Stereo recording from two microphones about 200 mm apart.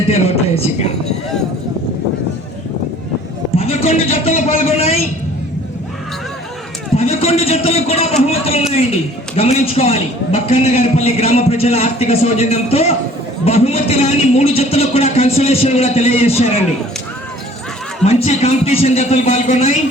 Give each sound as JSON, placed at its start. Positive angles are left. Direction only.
{"t": 0.1, "sound": "a man's voice", "side_deg": 30}
{"t": 3.6, "sound": "a man's voice", "side_deg": 35}
{"t": 6.9, "sound": "a man's voice", "side_deg": 30}
{"t": 18.0, "sound": "a man's voice", "side_deg": 35}